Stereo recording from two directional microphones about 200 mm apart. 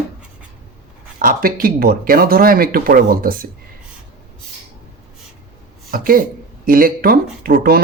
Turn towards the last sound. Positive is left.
turn(degrees=-45)  # may be behind; listen again after turning